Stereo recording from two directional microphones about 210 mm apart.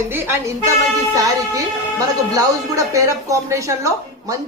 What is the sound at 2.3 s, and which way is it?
Speech, 15° right (ahead or behind).